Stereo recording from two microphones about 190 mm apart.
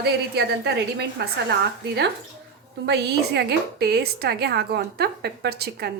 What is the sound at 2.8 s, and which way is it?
A woman's voice, 60° right (ahead or behind).